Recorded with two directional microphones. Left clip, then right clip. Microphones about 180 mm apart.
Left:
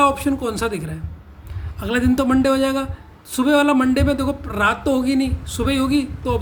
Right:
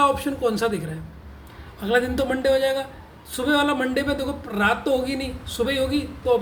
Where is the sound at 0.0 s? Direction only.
45° left (ahead or behind).